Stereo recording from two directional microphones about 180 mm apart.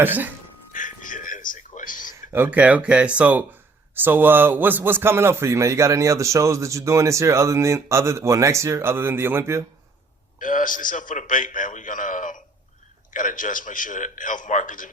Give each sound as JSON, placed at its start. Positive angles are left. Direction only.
{"t": 0.0, "sound": "a man's voice", "side_deg": -10}
{"t": 0.7, "sound": "music", "side_deg": 45}
{"t": 2.3, "sound": "a man's voice", "side_deg": -10}
{"t": 10.4, "sound": "a man's voice", "side_deg": 45}